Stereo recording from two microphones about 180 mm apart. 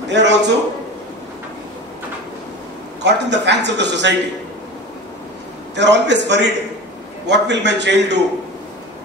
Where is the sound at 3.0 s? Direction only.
75° right (ahead or behind).